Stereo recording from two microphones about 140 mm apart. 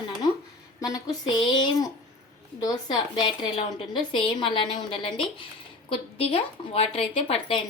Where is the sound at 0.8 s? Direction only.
25° left (ahead or behind).